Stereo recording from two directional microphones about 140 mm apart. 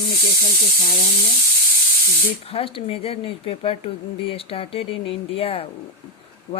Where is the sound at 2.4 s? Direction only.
40° left (ahead or behind).